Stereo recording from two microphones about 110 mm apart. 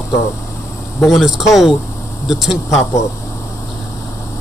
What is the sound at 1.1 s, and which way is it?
Speech, centre (ahead or behind).